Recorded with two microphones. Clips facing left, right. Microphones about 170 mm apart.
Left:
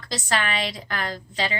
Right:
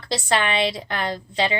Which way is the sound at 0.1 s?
30° right (ahead or behind).